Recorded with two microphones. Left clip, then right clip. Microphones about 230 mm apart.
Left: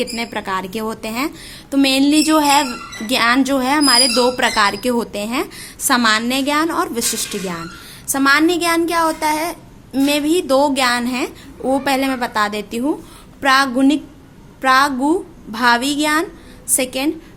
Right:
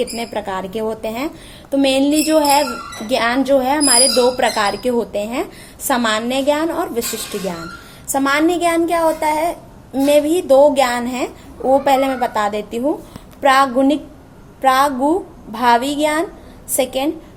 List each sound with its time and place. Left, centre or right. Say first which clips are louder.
0.0 s a woman's voice: right 1 dB; left
8.1 s a woman's voice: left 2 dB; left